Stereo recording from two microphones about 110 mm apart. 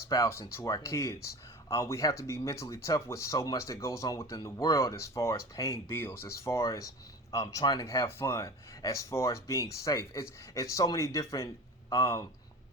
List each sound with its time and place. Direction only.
0.1 s speech: 25° left (ahead or behind)